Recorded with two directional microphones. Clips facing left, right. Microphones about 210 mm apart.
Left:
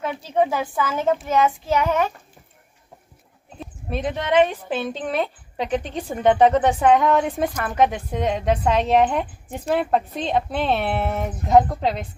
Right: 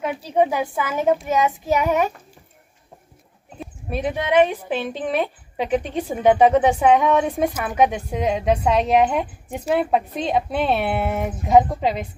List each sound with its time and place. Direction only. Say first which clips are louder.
0.0 s child singing: right 2 dB; 10° right (ahead or behind)
3.5 s speech: right 1 dB; 10° right (ahead or behind)